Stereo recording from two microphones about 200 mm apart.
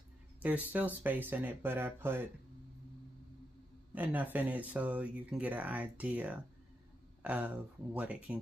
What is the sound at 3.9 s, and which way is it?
Speech, 10° right (ahead or behind).